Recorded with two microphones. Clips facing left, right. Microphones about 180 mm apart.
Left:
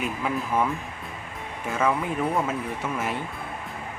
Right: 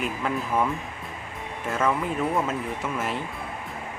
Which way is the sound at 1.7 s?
Centre (ahead or behind).